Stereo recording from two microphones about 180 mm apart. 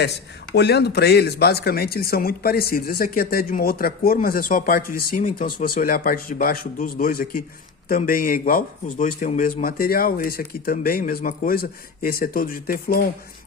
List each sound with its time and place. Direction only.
0.5 s speech: 65° left (ahead or behind)